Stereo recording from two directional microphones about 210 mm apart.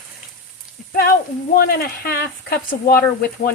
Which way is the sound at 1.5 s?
45° left (ahead or behind).